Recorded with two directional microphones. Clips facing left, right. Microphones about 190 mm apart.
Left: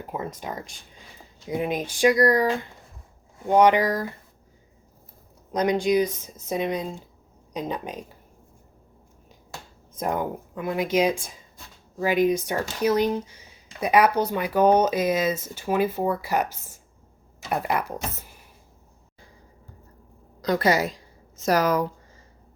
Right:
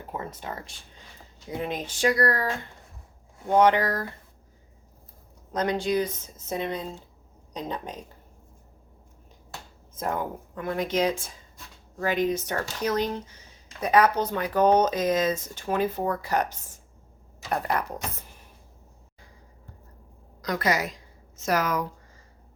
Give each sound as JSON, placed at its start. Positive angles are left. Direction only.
{"t": 0.1, "sound": "speech", "side_deg": 15}
{"t": 5.5, "sound": "speech", "side_deg": 15}
{"t": 9.9, "sound": "speech", "side_deg": 15}
{"t": 20.4, "sound": "a woman's voice", "side_deg": 30}